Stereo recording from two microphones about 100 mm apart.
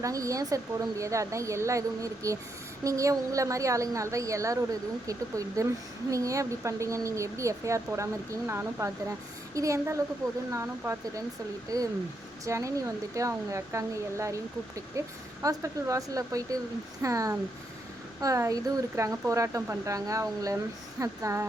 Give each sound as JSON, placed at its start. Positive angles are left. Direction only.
{"t": 0.0, "sound": "a woman's voice", "side_deg": -35}